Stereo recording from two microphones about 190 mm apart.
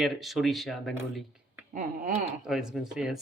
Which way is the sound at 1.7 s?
45° right (ahead or behind).